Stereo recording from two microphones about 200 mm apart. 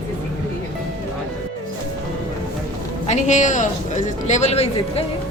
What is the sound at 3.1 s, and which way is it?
A man's voice, 35° left (ahead or behind).